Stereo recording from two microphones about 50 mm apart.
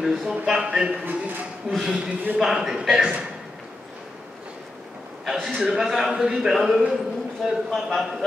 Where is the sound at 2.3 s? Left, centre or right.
Centre.